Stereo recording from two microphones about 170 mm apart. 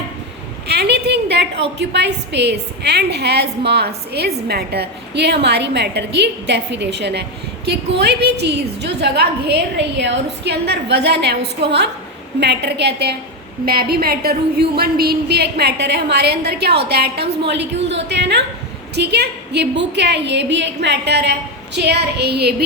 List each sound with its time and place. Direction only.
0.7 s a sound: 75° right (ahead or behind)
1.8 s a woman's voice: 90° right
12.4 s a woman's voice: 90° right
13.7 s a woman's voice: 65° right (ahead or behind)
17.4 s a woman's voice: 90° right
18.9 s a woman's voice: 75° right (ahead or behind)